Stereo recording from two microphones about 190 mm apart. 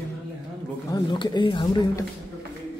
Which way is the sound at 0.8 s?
20° left (ahead or behind).